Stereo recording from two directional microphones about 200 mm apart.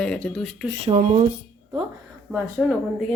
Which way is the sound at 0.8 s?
30° right (ahead or behind).